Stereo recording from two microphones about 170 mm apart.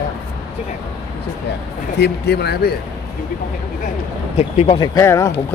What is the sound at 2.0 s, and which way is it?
Speech, 75° left (ahead or behind).